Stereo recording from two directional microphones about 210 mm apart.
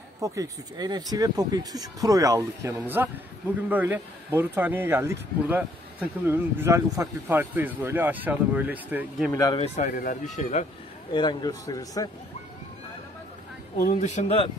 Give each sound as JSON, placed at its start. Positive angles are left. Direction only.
{"t": 0.2, "sound": "speech", "side_deg": -15}
{"t": 9.3, "sound": "a man's voice", "side_deg": 15}
{"t": 9.6, "sound": "speech", "side_deg": 35}
{"t": 11.1, "sound": "a man's voice", "side_deg": 20}
{"t": 13.7, "sound": "speech", "side_deg": 40}